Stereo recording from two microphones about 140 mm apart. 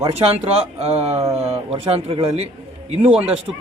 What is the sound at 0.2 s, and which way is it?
Speech, 45° right (ahead or behind).